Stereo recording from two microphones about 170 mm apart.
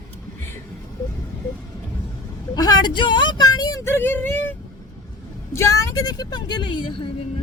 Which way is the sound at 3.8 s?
15° left (ahead or behind).